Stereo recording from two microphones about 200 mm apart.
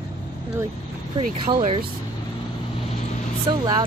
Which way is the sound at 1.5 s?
30° right (ahead or behind).